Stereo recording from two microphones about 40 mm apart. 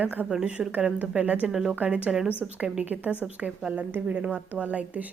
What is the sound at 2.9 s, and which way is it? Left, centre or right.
A woman's voice, right.